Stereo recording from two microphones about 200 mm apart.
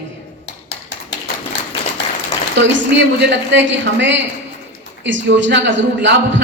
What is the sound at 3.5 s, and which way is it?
A woman's voice, 65° right (ahead or behind).